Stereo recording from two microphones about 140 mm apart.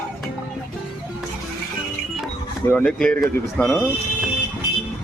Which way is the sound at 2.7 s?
10° left (ahead or behind).